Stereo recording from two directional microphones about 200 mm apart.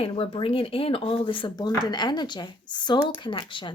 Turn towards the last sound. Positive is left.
turn(degrees=25)  # may be behind; listen again after turning